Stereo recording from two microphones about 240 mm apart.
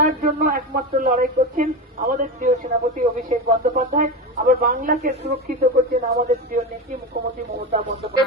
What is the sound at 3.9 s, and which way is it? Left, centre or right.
A woman's voice, right.